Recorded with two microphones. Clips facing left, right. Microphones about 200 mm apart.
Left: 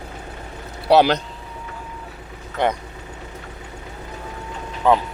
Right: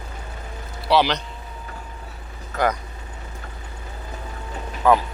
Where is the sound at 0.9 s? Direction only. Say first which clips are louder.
Left 5 dB; 50° left (ahead or behind).